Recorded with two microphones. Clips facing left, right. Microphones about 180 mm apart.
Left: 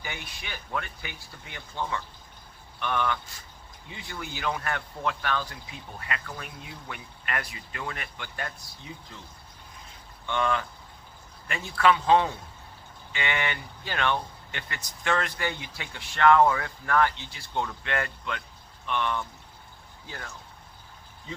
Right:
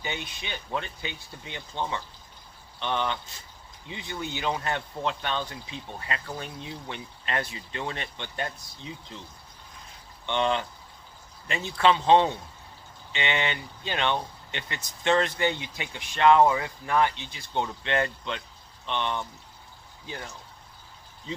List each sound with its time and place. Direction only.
0.0 s speech: 20° right (ahead or behind)
10.2 s speech: 25° right (ahead or behind)